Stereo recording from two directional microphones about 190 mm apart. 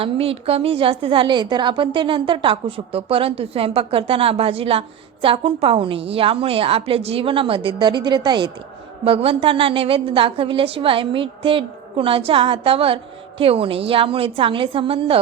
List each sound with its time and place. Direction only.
0.0 s a woman's voice: 30° right (ahead or behind)